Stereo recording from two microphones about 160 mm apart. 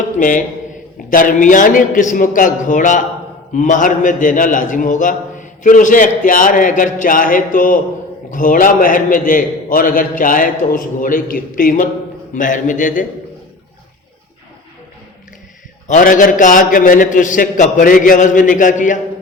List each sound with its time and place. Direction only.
0.2 s a man's voice: 55° left (ahead or behind)
15.9 s a man's voice: 55° left (ahead or behind)